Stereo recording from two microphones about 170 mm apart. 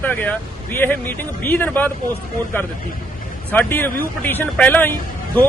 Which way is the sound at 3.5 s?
10° left (ahead or behind).